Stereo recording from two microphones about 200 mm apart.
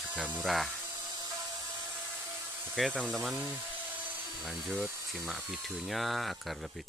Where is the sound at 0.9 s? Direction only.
20° right (ahead or behind).